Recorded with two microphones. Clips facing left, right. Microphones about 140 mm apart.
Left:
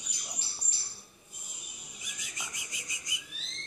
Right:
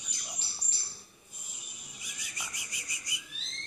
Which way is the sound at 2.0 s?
20° left (ahead or behind).